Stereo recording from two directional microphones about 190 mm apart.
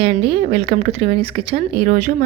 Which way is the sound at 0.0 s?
30° right (ahead or behind).